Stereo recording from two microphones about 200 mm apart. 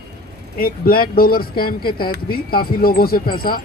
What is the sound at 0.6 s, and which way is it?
Speech, 45° left (ahead or behind).